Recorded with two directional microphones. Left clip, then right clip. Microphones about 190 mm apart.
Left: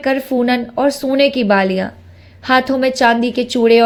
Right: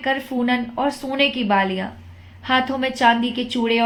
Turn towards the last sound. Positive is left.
turn(degrees=30)  # may be behind; listen again after turning